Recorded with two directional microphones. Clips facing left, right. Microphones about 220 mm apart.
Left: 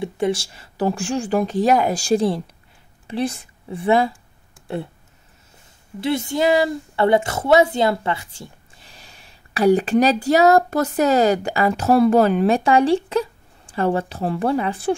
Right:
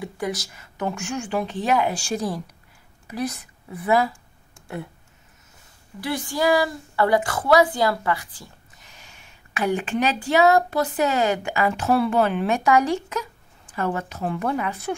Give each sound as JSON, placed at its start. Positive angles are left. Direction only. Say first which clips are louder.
{"t": 0.0, "sound": "a woman's voice", "louder": "left 7 dB", "side_deg": 25}
{"t": 4.7, "sound": "a sound", "louder": "left 6 dB", "side_deg": 30}
{"t": 5.9, "sound": "a woman's voice", "louder": "left 5 dB", "side_deg": 25}